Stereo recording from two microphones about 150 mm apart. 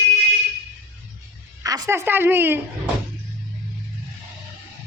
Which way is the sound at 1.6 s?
25° right (ahead or behind).